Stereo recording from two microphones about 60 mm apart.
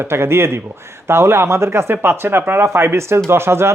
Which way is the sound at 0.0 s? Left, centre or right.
Right.